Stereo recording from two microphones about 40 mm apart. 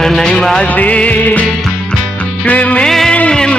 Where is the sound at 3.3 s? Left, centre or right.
Left.